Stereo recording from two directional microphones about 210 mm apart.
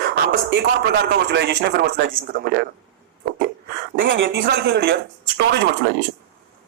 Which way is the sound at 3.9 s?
60° right (ahead or behind).